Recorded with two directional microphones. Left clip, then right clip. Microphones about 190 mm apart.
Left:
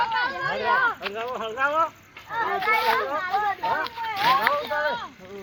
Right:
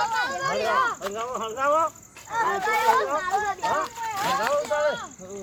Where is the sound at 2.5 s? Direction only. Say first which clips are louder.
Even; 10° right (ahead or behind).